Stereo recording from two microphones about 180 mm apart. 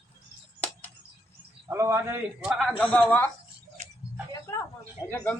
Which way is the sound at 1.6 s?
15° right (ahead or behind).